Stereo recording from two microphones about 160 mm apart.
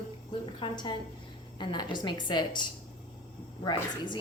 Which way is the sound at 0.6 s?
30° left (ahead or behind).